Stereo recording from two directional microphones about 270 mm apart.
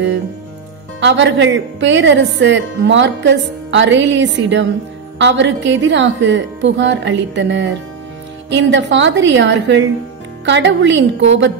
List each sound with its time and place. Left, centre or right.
1.0 s a woman's voice: right